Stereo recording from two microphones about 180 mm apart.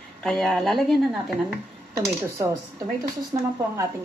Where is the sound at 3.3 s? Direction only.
20° right (ahead or behind).